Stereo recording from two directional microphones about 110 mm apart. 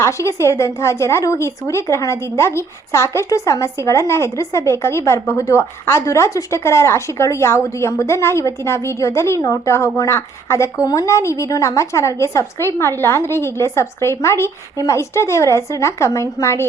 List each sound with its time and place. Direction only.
0.0 s speech: 25° left (ahead or behind)